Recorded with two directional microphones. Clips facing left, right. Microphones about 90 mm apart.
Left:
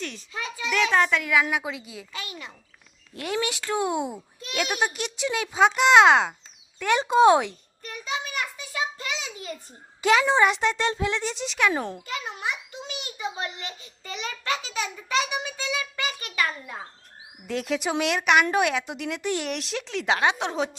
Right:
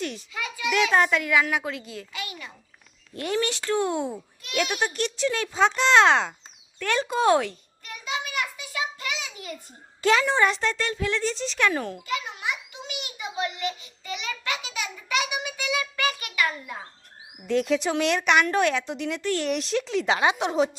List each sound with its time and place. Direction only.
0.3 s a sound: 30° left (ahead or behind)
0.7 s speech: 5° right (ahead or behind)
2.1 s a child's voice: 25° left (ahead or behind)
3.2 s speech: 5° left (ahead or behind)
7.9 s a sound: 35° left (ahead or behind)
10.0 s a child's voice: 5° left (ahead or behind)
11.7 s a child's voice: 25° left (ahead or behind)
12.0 s a sound: 35° left (ahead or behind)
17.4 s speech: 5° left (ahead or behind)
19.2 s speech: 15° left (ahead or behind)
19.5 s speech: centre (ahead or behind)